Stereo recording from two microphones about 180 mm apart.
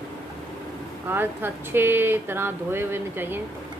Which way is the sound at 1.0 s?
10° right (ahead or behind).